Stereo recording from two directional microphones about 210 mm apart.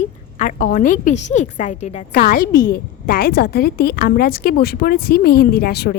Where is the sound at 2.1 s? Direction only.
45° left (ahead or behind).